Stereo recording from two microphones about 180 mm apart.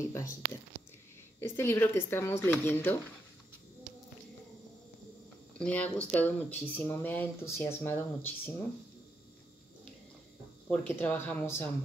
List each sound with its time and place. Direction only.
0.1 s speech: 15° left (ahead or behind)
5.6 s speech: 5° left (ahead or behind)
10.7 s speech: 10° left (ahead or behind)